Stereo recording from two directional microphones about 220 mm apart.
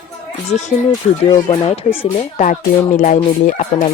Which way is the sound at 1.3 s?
25° left (ahead or behind).